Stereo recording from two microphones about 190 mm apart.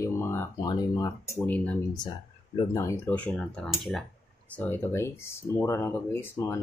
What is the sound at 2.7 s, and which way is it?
Speech, 15° left (ahead or behind).